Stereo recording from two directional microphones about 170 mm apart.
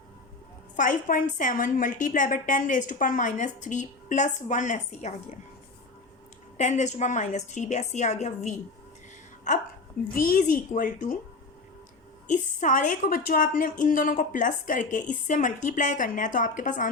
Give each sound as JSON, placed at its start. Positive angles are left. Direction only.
{"t": 0.8, "sound": "a woman's voice", "side_deg": 50}
{"t": 6.6, "sound": "a woman's voice", "side_deg": 45}
{"t": 10.2, "sound": "a woman's voice", "side_deg": 50}
{"t": 12.3, "sound": "a woman's voice", "side_deg": 45}